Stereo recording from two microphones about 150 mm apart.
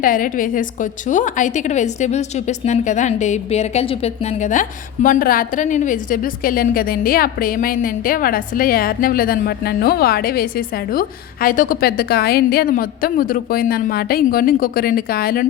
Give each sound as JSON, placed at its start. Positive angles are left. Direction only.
{"t": 0.0, "sound": "a woman's voice", "side_deg": 65}
{"t": 5.0, "sound": "a woman's voice", "side_deg": 65}
{"t": 10.9, "sound": "a woman's voice", "side_deg": 70}